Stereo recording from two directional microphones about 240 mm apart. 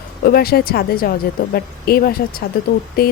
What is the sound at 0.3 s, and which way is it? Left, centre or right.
A woman's voice, left.